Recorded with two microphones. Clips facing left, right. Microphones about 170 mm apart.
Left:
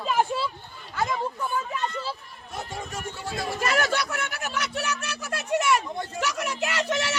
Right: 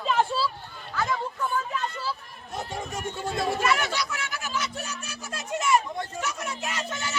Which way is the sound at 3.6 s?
40° left (ahead or behind).